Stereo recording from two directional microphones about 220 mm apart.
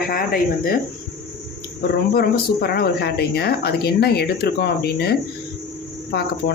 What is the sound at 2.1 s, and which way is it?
A woman's voice, 45° left (ahead or behind).